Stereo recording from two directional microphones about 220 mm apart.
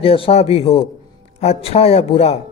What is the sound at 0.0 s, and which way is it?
Speech, 25° left (ahead or behind).